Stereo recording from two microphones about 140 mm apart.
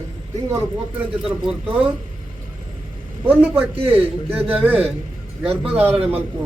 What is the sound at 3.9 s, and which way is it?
Speech, 15° right (ahead or behind).